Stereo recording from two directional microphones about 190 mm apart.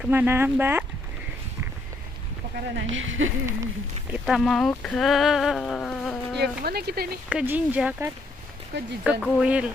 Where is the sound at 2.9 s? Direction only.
90° right.